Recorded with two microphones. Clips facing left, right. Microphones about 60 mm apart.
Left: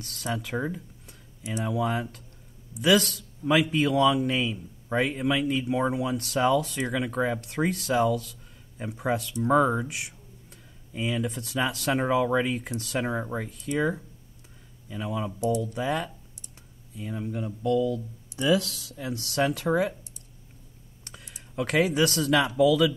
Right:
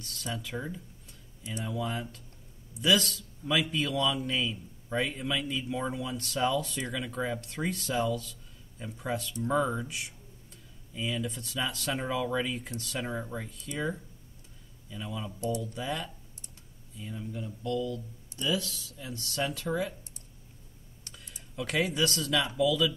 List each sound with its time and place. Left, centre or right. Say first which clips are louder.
0.0 s speech: left 6 dB; left
0.5 s speech: left 7 dB; left
1.8 s speech: left 6 dB; left
3.0 s speech: left 4 dB; left
4.3 s speech: left 4 dB; left
18.5 s speech: left 8 dB; left
18.9 s speech: left 7 dB; left
21.1 s speech: left 5 dB; left